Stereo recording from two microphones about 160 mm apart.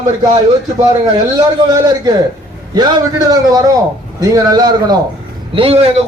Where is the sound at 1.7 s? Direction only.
25° right (ahead or behind).